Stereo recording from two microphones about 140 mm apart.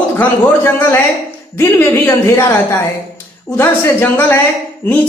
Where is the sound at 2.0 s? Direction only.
20° left (ahead or behind).